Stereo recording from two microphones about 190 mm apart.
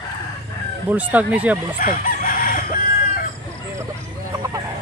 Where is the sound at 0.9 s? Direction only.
10° right (ahead or behind).